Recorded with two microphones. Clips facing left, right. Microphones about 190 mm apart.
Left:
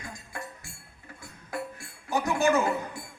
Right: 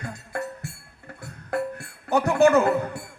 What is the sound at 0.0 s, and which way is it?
Music, 65° right (ahead or behind).